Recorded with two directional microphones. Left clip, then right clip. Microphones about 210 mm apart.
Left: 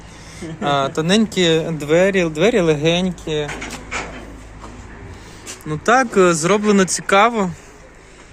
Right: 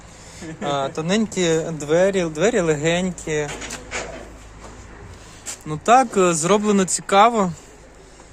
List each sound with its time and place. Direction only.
0.6 s speech: centre (ahead or behind); by 3.4 s 15° right (ahead or behind)
5.6 s speech: 20° right (ahead or behind)